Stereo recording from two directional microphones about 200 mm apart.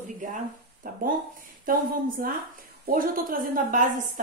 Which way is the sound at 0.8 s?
40° right (ahead or behind).